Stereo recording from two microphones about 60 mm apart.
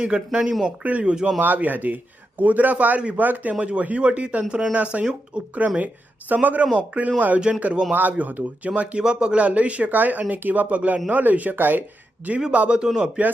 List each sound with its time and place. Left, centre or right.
0.0 s speech: centre
1.4 s speech: right
12.4 s speech: centre